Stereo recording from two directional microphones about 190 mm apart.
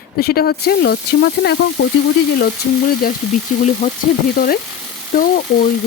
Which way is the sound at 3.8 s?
40° left (ahead or behind).